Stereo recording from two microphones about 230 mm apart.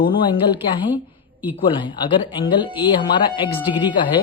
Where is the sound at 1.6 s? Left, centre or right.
Left.